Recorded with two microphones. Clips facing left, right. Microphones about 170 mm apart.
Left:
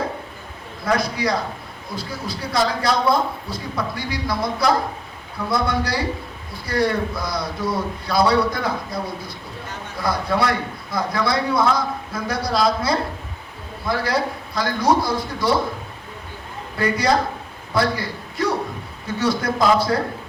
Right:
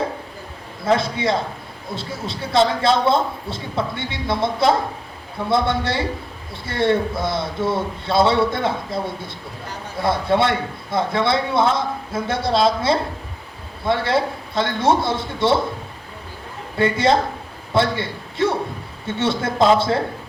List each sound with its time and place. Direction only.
0.9 s a man's voice: 25° right (ahead or behind)
16.7 s a man's voice: 25° right (ahead or behind)